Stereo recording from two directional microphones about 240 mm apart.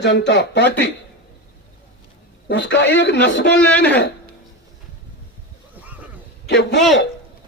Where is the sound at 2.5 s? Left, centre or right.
Left.